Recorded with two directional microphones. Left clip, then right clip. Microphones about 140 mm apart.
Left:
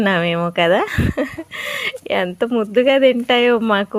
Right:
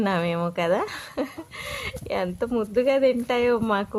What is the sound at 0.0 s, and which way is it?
Speech, 25° left (ahead or behind).